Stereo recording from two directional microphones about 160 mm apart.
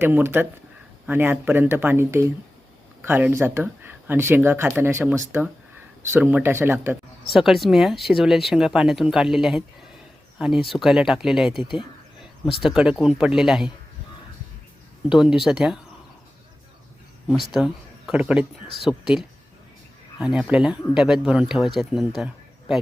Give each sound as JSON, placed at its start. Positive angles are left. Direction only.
{"t": 0.0, "sound": "speech", "side_deg": -15}
{"t": 7.3, "sound": "speech", "side_deg": 0}
{"t": 15.1, "sound": "speech", "side_deg": -5}
{"t": 17.2, "sound": "speech", "side_deg": 0}
{"t": 20.2, "sound": "speech", "side_deg": -5}